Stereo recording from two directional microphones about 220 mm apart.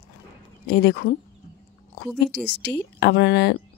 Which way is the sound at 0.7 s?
50° left (ahead or behind).